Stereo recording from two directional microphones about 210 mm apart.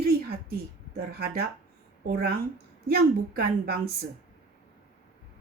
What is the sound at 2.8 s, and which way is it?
A woman's voice, 45° right (ahead or behind).